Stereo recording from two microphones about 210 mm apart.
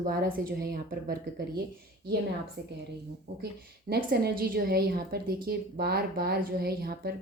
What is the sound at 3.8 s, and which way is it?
Speech, 50° right (ahead or behind).